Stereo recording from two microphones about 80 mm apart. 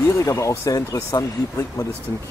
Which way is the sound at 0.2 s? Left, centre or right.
Left.